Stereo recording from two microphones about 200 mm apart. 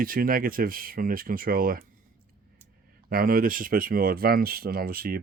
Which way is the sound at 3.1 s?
45° right (ahead or behind).